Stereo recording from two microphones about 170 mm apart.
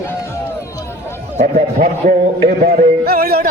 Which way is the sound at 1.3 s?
45° right (ahead or behind).